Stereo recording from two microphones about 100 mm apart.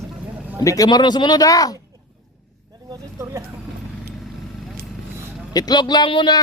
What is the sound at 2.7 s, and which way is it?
Vehicle, 35° right (ahead or behind).